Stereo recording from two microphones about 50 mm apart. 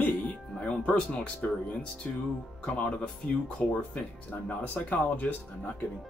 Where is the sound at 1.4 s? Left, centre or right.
Left.